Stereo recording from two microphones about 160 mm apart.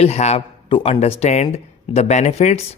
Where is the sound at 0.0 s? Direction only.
40° left (ahead or behind).